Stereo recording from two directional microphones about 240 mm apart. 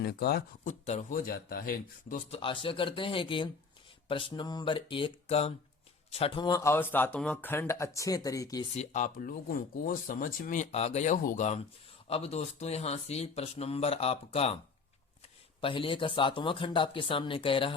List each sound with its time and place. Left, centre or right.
0.0 s speech: left; by 8.6 s centre
8.7 s speech: left
15.6 s speech: left